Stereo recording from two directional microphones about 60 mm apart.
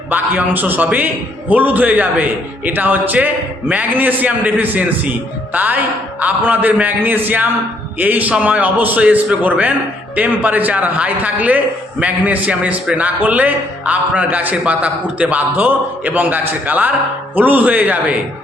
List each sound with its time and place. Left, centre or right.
0.1 s a man's voice: right